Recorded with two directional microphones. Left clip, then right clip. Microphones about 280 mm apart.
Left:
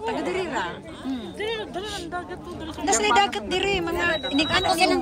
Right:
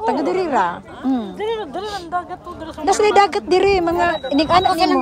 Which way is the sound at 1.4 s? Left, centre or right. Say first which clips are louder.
Right 2 dB; right.